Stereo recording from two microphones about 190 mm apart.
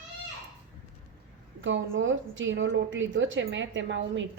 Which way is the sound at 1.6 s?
85° right.